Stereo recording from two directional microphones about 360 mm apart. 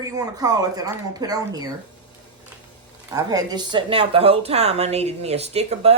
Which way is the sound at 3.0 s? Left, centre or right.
Centre.